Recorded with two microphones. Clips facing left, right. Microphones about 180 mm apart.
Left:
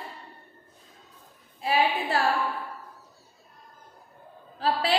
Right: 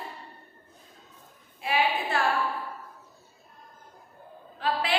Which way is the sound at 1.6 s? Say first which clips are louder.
Left 2 dB; 35° left (ahead or behind).